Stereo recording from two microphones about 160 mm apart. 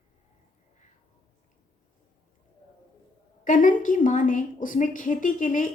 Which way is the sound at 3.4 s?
55° left (ahead or behind).